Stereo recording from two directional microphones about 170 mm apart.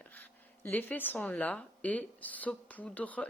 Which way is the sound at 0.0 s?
10° left (ahead or behind).